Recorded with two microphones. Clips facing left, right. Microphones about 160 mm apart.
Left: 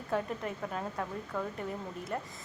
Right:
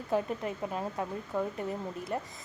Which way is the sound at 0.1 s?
5° right (ahead or behind).